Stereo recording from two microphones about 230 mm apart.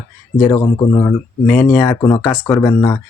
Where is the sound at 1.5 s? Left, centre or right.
Centre.